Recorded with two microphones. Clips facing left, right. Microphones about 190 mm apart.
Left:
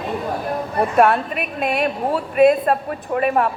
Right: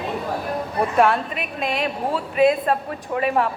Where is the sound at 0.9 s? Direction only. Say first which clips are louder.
Left 3 dB; 55° left (ahead or behind).